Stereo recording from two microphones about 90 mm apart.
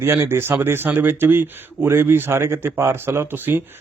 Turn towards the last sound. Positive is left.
turn(degrees=-25)  # may be behind; listen again after turning